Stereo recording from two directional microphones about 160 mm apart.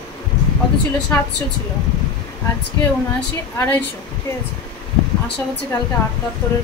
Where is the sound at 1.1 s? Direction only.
15° left (ahead or behind).